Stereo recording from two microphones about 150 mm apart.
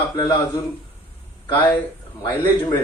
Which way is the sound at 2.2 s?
30° left (ahead or behind).